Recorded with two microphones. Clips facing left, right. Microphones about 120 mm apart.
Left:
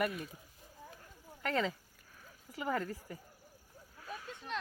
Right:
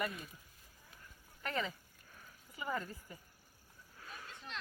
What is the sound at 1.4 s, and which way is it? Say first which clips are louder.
Speech: left 5 dB; 90° left.